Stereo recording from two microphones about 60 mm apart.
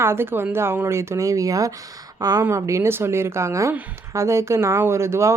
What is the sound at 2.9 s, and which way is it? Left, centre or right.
Speech, right.